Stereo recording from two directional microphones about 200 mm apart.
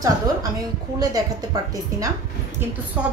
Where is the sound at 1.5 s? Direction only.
20° right (ahead or behind).